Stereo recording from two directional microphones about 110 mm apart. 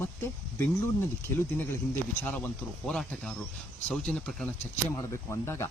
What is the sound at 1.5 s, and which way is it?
Speech, 20° left (ahead or behind).